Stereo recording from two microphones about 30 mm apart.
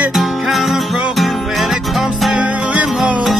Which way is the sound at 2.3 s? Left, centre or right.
Right.